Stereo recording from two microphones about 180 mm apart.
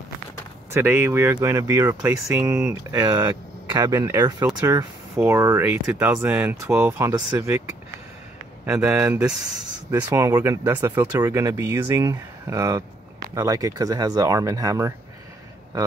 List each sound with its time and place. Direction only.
0.7 s speech: 15° right (ahead or behind)
8.6 s speech: 10° right (ahead or behind)